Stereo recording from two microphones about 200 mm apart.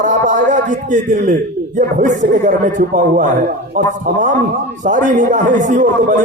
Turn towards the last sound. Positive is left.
turn(degrees=-40)  # may be behind; listen again after turning